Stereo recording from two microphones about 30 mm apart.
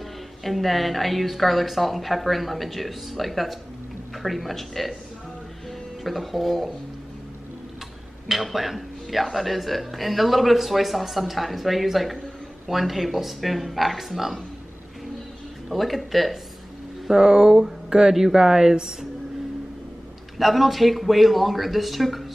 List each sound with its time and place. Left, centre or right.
0.4 s speech: centre
6.0 s speech: centre
8.3 s speech: centre
15.7 s speech: centre
17.1 s a woman's voice: right
20.3 s speech: centre